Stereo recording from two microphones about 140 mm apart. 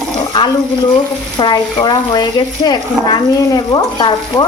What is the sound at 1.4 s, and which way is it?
Stir, 30° left (ahead or behind).